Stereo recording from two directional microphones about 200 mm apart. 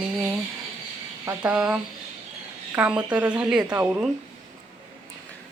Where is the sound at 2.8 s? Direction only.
5° right (ahead or behind).